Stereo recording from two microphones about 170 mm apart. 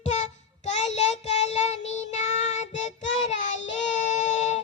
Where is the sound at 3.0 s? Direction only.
90° left.